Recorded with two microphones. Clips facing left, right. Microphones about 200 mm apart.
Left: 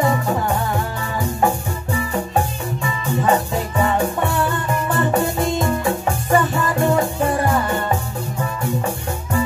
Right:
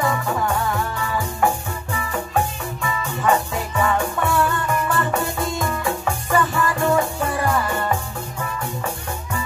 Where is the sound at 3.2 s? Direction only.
25° left (ahead or behind).